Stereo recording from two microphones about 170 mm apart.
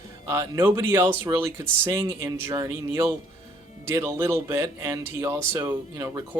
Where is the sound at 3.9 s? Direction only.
15° right (ahead or behind).